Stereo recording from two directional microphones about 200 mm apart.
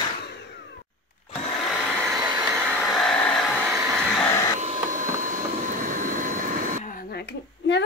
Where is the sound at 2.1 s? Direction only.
20° right (ahead or behind).